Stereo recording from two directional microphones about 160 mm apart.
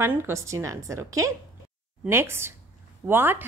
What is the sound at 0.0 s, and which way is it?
A woman's voice, 15° right (ahead or behind).